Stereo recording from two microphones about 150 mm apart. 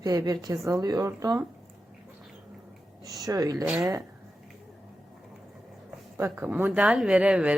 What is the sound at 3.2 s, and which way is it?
Speech, 25° right (ahead or behind).